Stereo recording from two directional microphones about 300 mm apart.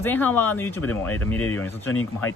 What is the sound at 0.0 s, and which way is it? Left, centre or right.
Speech, centre.